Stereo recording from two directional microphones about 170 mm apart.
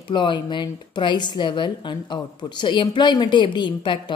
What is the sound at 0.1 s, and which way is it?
A woman's voice, 30° left (ahead or behind).